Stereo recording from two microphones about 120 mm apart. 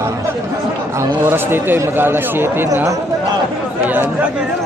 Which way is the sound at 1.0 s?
20° right (ahead or behind).